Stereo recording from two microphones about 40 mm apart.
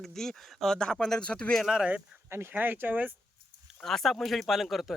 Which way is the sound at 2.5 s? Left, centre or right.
Right.